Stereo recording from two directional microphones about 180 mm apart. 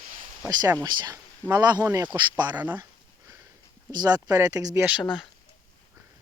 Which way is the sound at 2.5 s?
10° right (ahead or behind).